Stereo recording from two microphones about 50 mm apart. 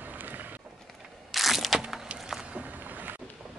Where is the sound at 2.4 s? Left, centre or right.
Right.